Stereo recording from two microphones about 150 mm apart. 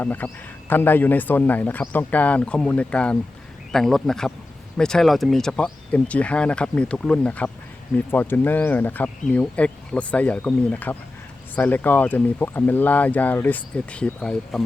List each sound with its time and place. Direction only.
0.0 s speech: 10° left (ahead or behind)